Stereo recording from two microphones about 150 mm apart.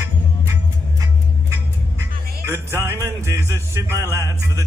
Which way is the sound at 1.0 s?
20° right (ahead or behind).